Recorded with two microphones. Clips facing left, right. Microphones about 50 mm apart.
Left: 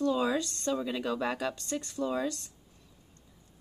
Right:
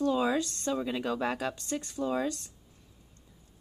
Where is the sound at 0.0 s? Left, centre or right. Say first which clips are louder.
Right 1 dB; centre.